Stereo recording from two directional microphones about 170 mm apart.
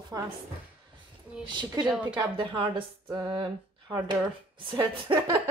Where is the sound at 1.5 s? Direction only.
25° right (ahead or behind).